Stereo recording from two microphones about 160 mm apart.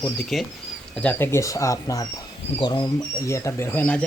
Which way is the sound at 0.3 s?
Centre (ahead or behind).